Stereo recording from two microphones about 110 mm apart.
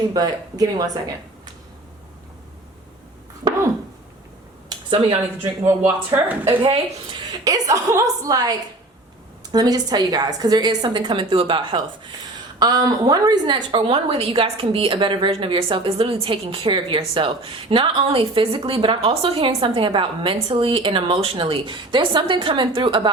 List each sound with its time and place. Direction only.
0.1 s a woman's voice: 35° right (ahead or behind)
4.9 s speech: 55° right (ahead or behind)
6.2 s a woman's voice: 15° right (ahead or behind)
6.6 s a woman's voice: 50° right (ahead or behind)
7.4 s a woman's voice: 30° right (ahead or behind); by 11.8 s 50° right (ahead or behind)
12.5 s a woman's voice: 35° right (ahead or behind)